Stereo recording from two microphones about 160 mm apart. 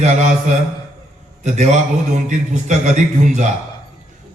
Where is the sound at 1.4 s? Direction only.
45° right (ahead or behind).